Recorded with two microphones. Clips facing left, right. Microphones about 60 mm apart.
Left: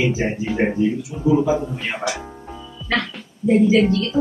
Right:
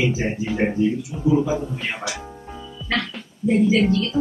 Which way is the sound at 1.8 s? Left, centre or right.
Centre.